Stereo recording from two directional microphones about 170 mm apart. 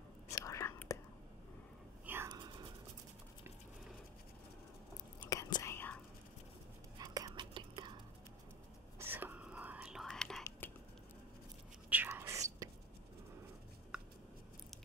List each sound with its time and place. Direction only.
0.3 s whispering: 20° left (ahead or behind)
2.2 s dog: 25° right (ahead or behind)
5.3 s whispering: 20° left (ahead or behind)
7.0 s whispering: 20° right (ahead or behind)
8.9 s whispering: 15° right (ahead or behind); by 10.4 s 5° left (ahead or behind)
10.6 s a sound: 10° left (ahead or behind)
11.9 s whispering: 15° right (ahead or behind)